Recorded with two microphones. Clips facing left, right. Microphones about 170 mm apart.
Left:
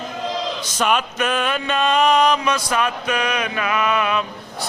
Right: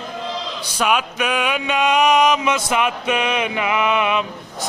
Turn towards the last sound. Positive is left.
turn(degrees=-20)  # may be behind; listen again after turning